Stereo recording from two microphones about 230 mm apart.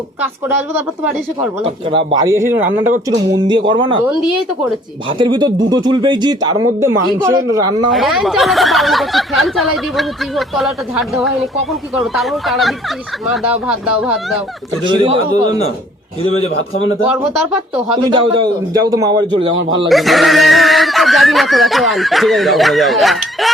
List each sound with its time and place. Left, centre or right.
2.0 s a man's voice: centre
5.0 s speech: right
7.9 s speech: centre
14.8 s a man's voice: right
17.9 s a man's voice: centre
19.9 s speech: centre